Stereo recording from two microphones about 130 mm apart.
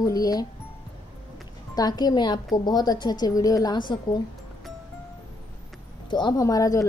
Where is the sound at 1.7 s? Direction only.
30° left (ahead or behind).